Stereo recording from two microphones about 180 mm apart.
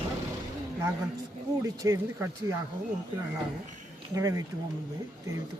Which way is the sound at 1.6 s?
15° right (ahead or behind).